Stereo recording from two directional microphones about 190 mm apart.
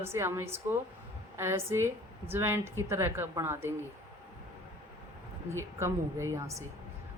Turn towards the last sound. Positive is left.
turn(degrees=-15)  # may be behind; listen again after turning